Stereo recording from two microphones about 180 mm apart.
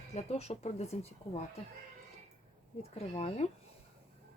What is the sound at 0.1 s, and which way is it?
Speech, 35° left (ahead or behind).